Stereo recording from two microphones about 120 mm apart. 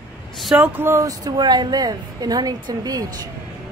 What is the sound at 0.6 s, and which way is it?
Speech, 15° right (ahead or behind).